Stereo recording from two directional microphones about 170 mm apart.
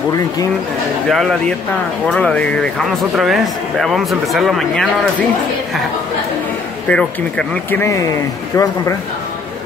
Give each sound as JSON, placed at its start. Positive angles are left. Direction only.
{"t": 1.0, "sound": "speech", "side_deg": 0}
{"t": 6.9, "sound": "speech", "side_deg": 5}
{"t": 7.8, "sound": "speech", "side_deg": 20}